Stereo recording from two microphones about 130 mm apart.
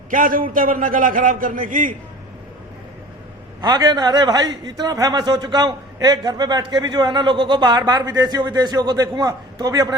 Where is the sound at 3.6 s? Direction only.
35° right (ahead or behind).